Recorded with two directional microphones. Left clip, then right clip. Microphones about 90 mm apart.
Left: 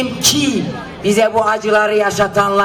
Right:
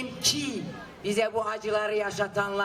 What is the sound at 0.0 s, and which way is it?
A woman's voice, 20° right (ahead or behind).